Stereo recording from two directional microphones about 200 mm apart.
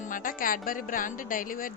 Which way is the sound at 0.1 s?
45° left (ahead or behind).